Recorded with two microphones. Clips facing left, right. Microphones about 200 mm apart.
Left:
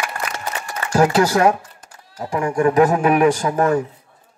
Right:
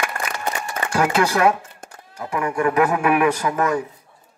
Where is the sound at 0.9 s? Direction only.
40° left (ahead or behind).